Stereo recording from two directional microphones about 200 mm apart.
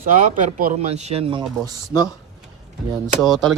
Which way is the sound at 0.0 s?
40° right (ahead or behind).